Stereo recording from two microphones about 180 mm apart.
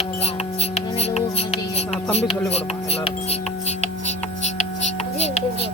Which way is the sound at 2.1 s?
35° left (ahead or behind).